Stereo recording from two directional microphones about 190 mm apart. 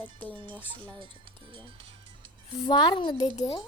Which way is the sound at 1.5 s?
25° right (ahead or behind).